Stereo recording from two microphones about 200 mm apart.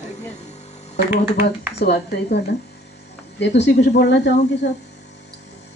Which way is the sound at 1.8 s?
55° left (ahead or behind).